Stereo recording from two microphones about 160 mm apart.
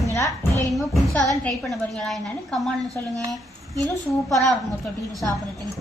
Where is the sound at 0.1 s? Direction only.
20° left (ahead or behind).